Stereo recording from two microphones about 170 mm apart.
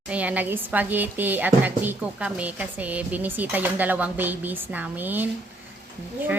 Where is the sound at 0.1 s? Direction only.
10° right (ahead or behind).